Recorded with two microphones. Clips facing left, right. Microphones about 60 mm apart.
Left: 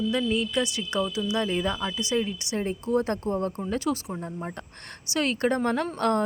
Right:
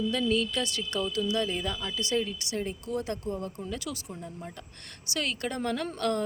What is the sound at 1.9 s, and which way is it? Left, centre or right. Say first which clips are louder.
Speech: left 3 dB; centre.